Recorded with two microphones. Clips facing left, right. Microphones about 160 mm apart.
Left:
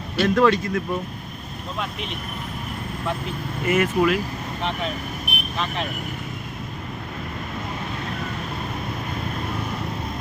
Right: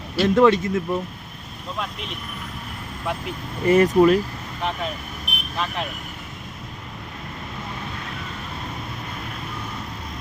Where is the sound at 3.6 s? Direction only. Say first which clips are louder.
Right 5 dB; 35° right (ahead or behind).